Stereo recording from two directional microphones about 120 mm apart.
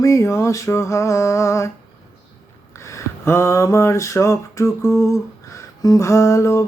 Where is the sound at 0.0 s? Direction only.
25° left (ahead or behind).